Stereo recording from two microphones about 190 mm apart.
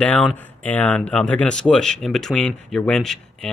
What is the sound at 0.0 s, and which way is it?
Speech, 5° left (ahead or behind).